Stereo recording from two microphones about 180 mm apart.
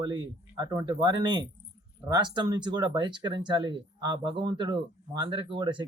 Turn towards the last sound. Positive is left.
turn(degrees=-25)  # may be behind; listen again after turning